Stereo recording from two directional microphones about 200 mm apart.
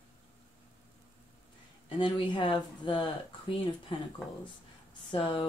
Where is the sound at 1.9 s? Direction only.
25° left (ahead or behind).